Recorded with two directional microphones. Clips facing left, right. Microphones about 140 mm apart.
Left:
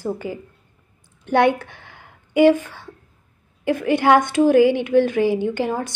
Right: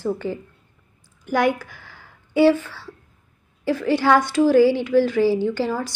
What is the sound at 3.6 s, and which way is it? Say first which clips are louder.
A woman's voice: left 2 dB; 20° left (ahead or behind).